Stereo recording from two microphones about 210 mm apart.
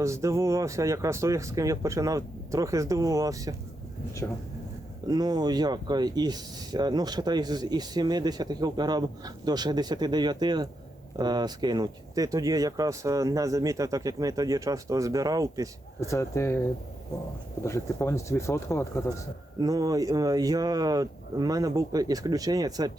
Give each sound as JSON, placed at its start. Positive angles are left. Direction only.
{"t": 0.0, "sound": "speech", "side_deg": -15}
{"t": 5.0, "sound": "speech", "side_deg": -20}
{"t": 16.0, "sound": "speech", "side_deg": 15}
{"t": 19.5, "sound": "speech", "side_deg": -15}